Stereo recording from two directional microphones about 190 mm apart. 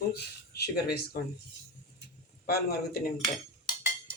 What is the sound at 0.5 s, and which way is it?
Speech, 55° left (ahead or behind).